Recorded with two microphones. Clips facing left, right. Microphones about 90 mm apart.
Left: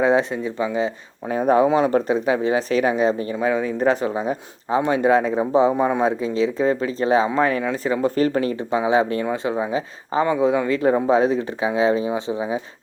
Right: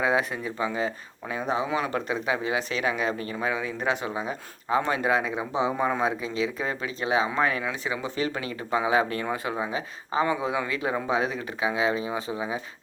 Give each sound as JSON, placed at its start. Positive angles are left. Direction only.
{"t": 0.0, "sound": "speech", "side_deg": 30}
{"t": 1.3, "sound": "speech", "side_deg": 50}
{"t": 1.7, "sound": "speech", "side_deg": 35}
{"t": 8.7, "sound": "speech", "side_deg": 25}